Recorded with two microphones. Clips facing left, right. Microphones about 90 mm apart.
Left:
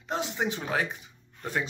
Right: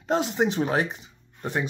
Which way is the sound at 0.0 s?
35° right (ahead or behind).